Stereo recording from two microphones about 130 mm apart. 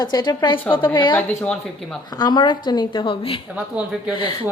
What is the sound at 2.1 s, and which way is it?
A woman's voice, 35° left (ahead or behind).